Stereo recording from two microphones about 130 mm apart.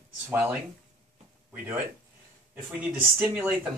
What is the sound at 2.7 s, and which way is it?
Speech, 10° right (ahead or behind).